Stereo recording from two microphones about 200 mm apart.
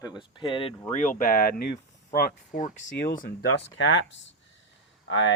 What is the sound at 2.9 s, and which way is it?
Speech, 50° left (ahead or behind).